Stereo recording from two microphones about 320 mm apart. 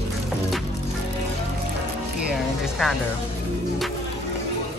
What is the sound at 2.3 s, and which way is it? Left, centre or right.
Music, centre.